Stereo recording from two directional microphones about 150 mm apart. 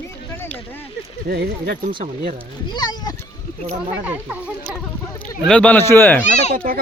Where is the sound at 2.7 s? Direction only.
30° left (ahead or behind).